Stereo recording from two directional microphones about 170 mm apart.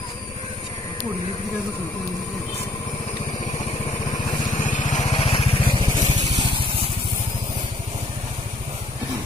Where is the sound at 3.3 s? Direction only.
40° left (ahead or behind).